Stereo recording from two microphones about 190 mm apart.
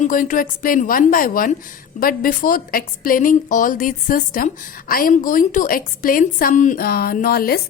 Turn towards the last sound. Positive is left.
turn(degrees=50)  # may be behind; listen again after turning